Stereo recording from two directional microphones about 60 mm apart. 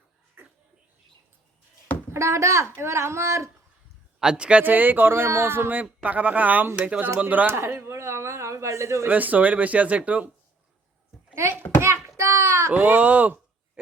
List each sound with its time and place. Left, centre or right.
2.1 s a child's voice: right
4.2 s speech: centre
4.6 s speech: right
7.5 s a sound: right
9.0 s speech: right
12.0 s a sound: right
12.7 s speech: right